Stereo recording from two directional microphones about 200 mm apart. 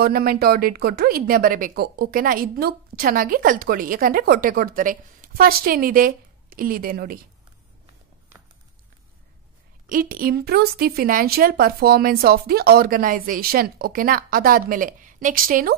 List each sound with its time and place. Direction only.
0.0 s speech: 50° right (ahead or behind)
9.8 s speech: 45° right (ahead or behind)